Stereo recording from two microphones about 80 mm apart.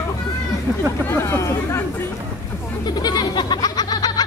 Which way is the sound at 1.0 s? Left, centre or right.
Left.